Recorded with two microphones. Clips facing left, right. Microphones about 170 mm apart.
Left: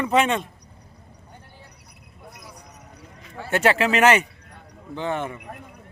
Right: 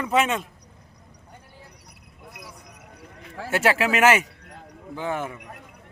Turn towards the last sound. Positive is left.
turn(degrees=-5)  # may be behind; listen again after turning